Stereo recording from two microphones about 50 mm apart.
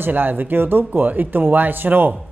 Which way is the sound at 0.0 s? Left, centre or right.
Right.